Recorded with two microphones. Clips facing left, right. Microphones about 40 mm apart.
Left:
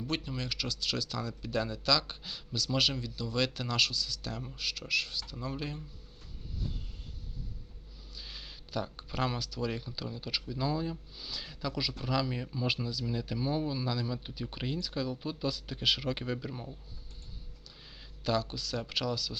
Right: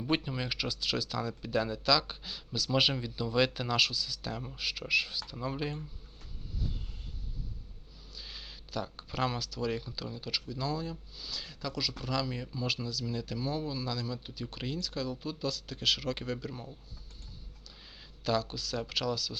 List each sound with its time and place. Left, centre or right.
0.0 s speech: centre
8.1 s speech: centre
18.2 s speech: centre